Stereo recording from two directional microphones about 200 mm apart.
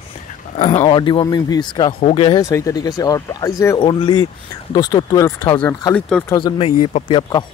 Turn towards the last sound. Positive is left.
turn(degrees=25)  # may be behind; listen again after turning